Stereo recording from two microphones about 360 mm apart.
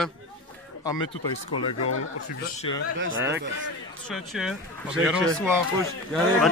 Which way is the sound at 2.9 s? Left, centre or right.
Right.